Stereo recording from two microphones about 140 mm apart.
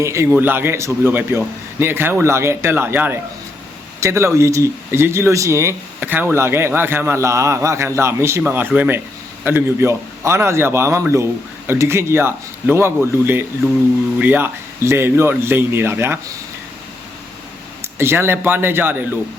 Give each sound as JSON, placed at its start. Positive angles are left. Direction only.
{"t": 0.0, "sound": "a man's voice", "side_deg": -20}
{"t": 17.9, "sound": "a man's voice", "side_deg": -15}